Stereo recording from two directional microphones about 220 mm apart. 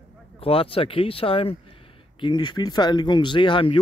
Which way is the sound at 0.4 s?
25° left (ahead or behind).